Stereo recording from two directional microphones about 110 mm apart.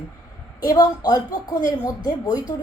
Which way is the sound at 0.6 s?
35° left (ahead or behind).